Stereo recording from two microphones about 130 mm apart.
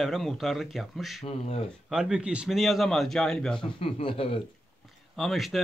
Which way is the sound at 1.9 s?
5° right (ahead or behind).